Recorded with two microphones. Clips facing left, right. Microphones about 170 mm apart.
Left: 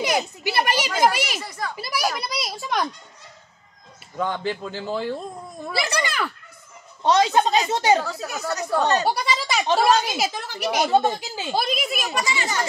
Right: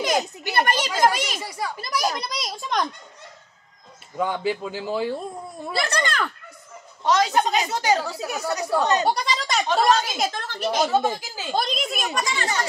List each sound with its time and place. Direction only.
0.0 s a child's voice: 5° left (ahead or behind)
1.4 s speech: 10° right (ahead or behind)
1.8 s a child's voice: 5° left (ahead or behind)
4.2 s speech: 5° right (ahead or behind)
5.7 s a child's voice: 10° left (ahead or behind)
7.0 s a woman's voice: 20° left (ahead or behind)
8.0 s speech: 10° right (ahead or behind)
9.0 s a child's voice: 5° left (ahead or behind)